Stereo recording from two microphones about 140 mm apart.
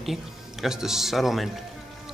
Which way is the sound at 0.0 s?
Centre (ahead or behind).